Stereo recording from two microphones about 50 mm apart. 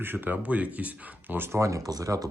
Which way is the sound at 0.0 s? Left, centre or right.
Right.